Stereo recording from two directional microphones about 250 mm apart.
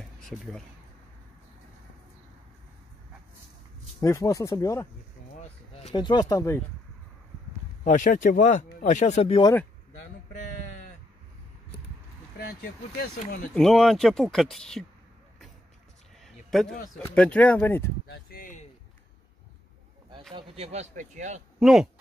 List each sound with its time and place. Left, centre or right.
0.3 s speech: centre
4.0 s speech: centre
5.9 s speech: centre
7.8 s speech: left
13.0 s speech: left
13.6 s speech: centre
16.4 s a sound: centre
17.0 s speech: centre
18.0 s speech: left
20.3 s speech: right
21.5 s speech: centre